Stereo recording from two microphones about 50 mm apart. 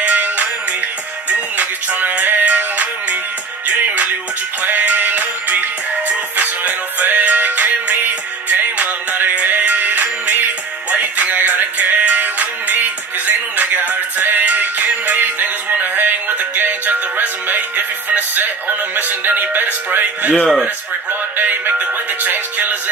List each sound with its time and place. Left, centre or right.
0.0 s music: right